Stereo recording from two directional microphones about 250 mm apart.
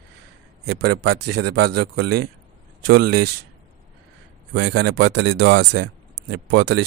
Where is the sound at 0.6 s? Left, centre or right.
Right.